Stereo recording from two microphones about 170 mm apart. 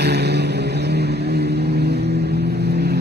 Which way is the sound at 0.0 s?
75° right (ahead or behind).